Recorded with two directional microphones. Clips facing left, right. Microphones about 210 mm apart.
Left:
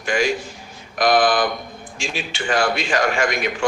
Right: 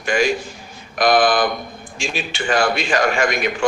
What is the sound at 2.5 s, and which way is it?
Speech, 55° right (ahead or behind).